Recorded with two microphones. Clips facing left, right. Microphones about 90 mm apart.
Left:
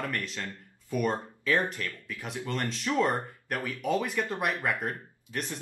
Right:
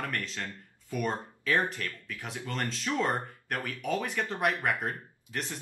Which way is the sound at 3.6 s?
10° left (ahead or behind).